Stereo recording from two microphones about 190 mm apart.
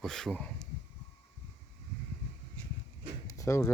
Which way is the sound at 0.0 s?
Centre (ahead or behind).